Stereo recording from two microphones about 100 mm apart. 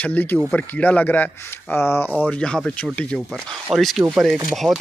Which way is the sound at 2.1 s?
10° left (ahead or behind).